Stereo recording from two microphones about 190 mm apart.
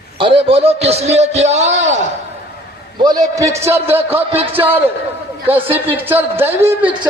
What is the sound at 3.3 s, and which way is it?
Speech, 15° right (ahead or behind).